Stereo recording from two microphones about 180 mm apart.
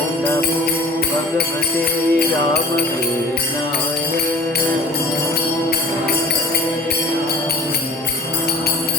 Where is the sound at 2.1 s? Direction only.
60° left (ahead or behind).